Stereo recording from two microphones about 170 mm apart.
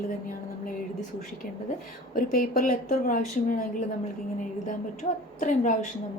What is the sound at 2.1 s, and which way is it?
A woman's voice, 60° left (ahead or behind).